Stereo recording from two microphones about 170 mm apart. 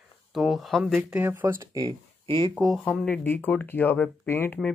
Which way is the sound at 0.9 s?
10° right (ahead or behind).